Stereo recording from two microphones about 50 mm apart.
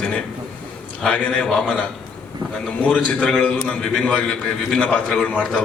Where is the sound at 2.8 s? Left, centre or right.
Left.